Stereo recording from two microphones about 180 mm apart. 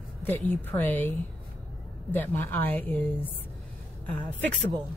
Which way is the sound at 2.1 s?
10° left (ahead or behind).